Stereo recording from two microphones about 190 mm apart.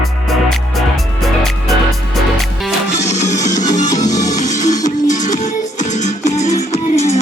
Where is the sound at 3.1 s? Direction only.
40° left (ahead or behind).